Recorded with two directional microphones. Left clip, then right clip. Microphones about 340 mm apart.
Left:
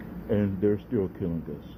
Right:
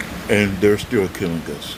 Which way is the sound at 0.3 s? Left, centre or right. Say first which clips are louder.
Right 10 dB; centre.